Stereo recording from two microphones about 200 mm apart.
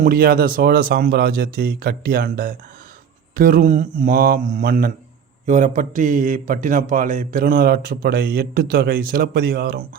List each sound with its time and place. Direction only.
0.0 s a man's voice: 45° right (ahead or behind)